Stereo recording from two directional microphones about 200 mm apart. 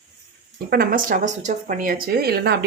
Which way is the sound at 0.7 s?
45° right (ahead or behind).